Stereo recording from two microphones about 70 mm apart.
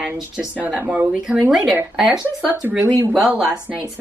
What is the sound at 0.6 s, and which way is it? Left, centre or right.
Speech, right.